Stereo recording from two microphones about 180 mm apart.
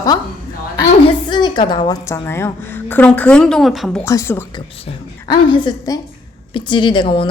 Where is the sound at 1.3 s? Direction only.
25° left (ahead or behind); by 4.0 s centre (ahead or behind).